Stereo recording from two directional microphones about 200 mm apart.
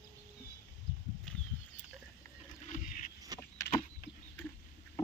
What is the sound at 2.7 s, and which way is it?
Boat, 40° left (ahead or behind).